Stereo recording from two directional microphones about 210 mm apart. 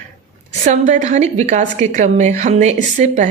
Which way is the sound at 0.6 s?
35° right (ahead or behind).